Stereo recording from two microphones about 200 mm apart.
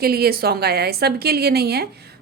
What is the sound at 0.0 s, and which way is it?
A woman's voice, 50° right (ahead or behind).